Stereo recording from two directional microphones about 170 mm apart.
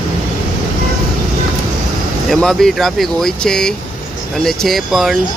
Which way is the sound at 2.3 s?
Centre (ahead or behind).